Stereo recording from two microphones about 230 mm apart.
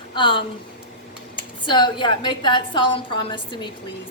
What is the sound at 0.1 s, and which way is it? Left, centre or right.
Speech, left.